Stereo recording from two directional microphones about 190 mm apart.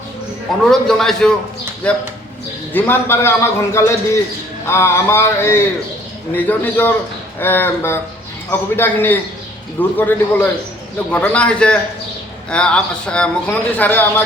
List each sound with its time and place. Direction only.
0.7 s a man's voice: centre (ahead or behind)